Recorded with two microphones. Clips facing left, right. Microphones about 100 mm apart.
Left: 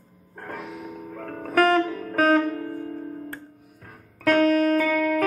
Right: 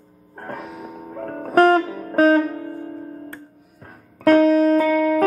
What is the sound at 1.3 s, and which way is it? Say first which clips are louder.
Music: right 5 dB; 25° right (ahead or behind).